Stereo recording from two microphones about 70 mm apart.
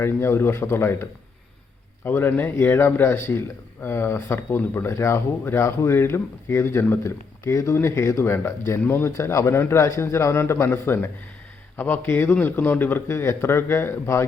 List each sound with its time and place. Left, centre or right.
0.0 s speech: left
2.0 s speech: left
7.0 s speech: left
9.0 s speech: left